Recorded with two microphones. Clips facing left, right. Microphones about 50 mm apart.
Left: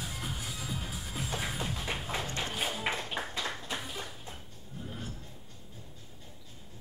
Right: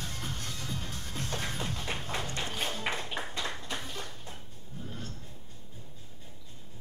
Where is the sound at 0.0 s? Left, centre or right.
Centre.